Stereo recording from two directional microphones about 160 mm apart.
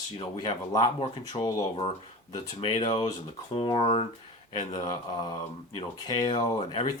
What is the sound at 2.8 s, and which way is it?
Speech, 30° left (ahead or behind).